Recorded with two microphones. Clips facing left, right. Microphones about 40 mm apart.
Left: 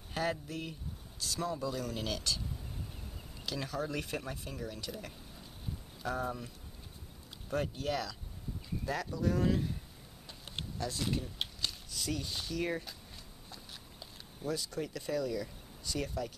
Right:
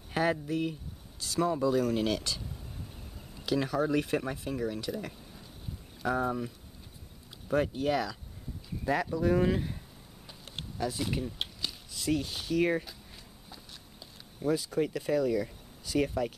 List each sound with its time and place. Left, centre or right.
0.1 s speech: centre
3.4 s speech: centre
6.0 s speech: centre
10.8 s a sound: centre
12.1 s speech: centre
14.4 s speech: centre